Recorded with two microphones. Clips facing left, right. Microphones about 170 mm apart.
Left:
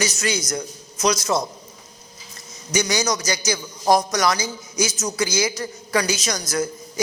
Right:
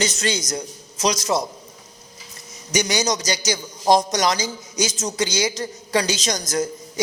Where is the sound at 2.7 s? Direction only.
20° right (ahead or behind).